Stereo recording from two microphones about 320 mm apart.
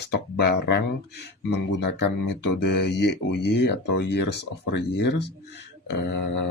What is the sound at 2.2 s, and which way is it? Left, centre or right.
Speech, left.